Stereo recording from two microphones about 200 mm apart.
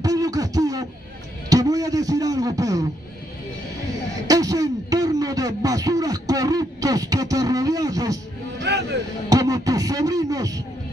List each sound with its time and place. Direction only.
0.0 s beatboxing: 20° right (ahead or behind)
1.5 s speech: 20° right (ahead or behind)
4.3 s speech: 15° right (ahead or behind)
8.5 s speech: 60° right (ahead or behind)
9.3 s speech: 20° right (ahead or behind)